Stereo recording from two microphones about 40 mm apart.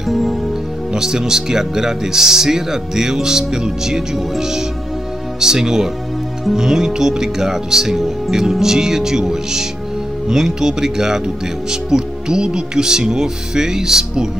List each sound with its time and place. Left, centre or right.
0.0 s music: centre
0.9 s speech: centre